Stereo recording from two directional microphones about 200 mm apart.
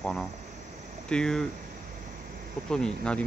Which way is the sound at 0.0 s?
Centre (ahead or behind).